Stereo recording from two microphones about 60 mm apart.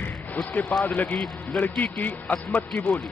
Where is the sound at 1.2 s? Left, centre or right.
Left.